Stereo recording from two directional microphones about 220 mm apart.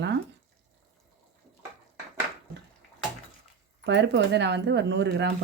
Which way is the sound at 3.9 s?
50° right (ahead or behind).